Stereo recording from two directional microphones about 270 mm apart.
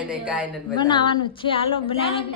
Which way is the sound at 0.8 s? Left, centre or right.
Centre.